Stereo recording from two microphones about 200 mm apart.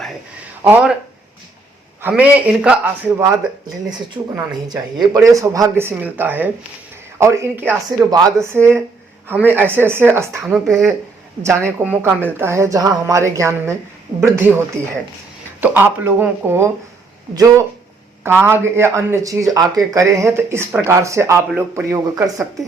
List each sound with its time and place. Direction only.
0.6 s speech: 5° right (ahead or behind)
2.0 s speech: 10° right (ahead or behind)
4.4 s speech: 5° right (ahead or behind)
5.1 s speech: 15° right (ahead or behind)
10.4 s speech: centre (ahead or behind)
15.6 s speech: 10° right (ahead or behind)